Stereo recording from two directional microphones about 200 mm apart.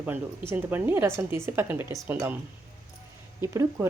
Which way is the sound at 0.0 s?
10° right (ahead or behind).